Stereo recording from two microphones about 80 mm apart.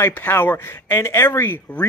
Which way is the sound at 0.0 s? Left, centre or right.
Left.